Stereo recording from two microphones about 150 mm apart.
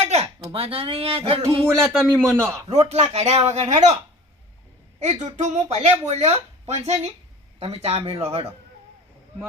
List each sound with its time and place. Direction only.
0.0 s a sound: 45° right (ahead or behind)
0.5 s speech: 40° right (ahead or behind)
1.5 s a man's voice: 15° right (ahead or behind)
1.8 s speech: 5° left (ahead or behind)
2.1 s a man's voice: 15° right (ahead or behind)
2.6 s speech: 45° right (ahead or behind)
4.9 s speech: 50° right (ahead or behind)